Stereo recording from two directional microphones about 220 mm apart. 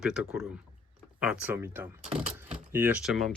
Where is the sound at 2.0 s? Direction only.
25° right (ahead or behind).